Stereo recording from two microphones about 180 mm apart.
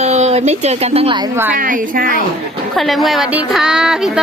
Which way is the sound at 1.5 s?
50° right (ahead or behind).